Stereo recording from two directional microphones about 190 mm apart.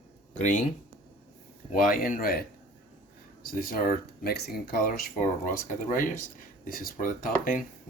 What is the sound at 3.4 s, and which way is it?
Speech, 50° left (ahead or behind).